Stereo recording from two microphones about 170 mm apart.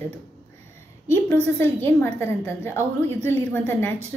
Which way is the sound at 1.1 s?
15° left (ahead or behind).